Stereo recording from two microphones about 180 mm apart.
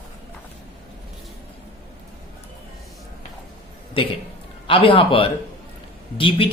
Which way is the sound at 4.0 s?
30° left (ahead or behind).